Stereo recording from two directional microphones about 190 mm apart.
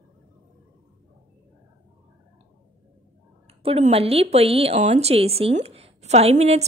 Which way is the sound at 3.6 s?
35° right (ahead or behind).